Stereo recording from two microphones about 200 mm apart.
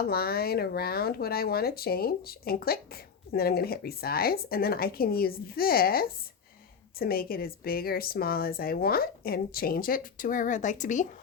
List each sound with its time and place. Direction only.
0.1 s speech: 50° left (ahead or behind)